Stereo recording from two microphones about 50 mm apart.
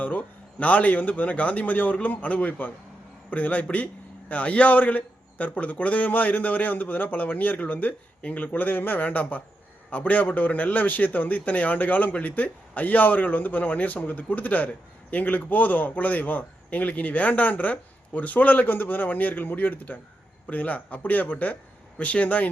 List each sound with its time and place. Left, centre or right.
0.0 s a man's voice: left